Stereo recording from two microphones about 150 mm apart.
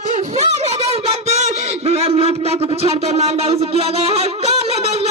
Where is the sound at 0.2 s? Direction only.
45° right (ahead or behind).